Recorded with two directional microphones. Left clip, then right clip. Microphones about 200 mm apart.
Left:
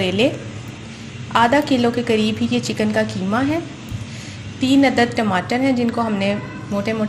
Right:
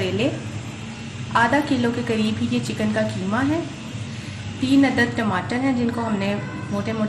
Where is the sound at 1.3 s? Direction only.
35° left (ahead or behind).